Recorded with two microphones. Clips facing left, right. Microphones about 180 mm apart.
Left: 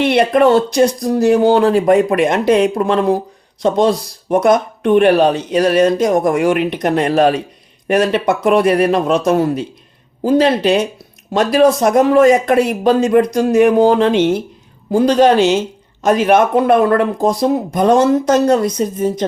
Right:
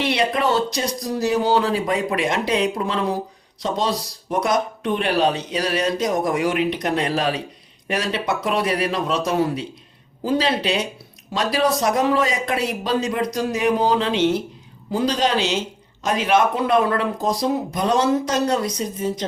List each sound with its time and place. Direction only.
0.0 s speech: 55° left (ahead or behind)